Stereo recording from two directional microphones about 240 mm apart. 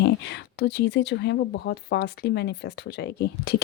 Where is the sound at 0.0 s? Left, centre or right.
Left.